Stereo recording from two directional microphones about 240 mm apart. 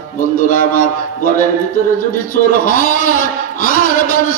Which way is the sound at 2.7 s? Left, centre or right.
Left.